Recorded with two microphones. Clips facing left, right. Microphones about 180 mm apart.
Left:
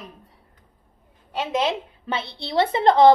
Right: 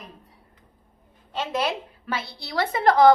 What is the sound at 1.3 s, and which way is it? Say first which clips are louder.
A woman's voice: left 3 dB; 15° left (ahead or behind).